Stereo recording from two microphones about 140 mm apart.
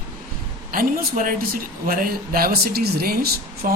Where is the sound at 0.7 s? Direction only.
75° right (ahead or behind).